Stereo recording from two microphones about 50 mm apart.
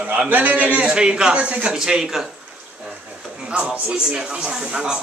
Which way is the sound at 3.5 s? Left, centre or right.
Right.